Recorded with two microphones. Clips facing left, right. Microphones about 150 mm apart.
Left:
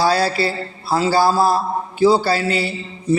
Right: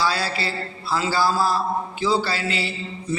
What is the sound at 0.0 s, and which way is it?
Mantra, 40° left (ahead or behind).